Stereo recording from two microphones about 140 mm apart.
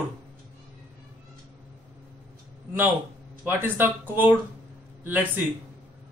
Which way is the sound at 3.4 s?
15° right (ahead or behind).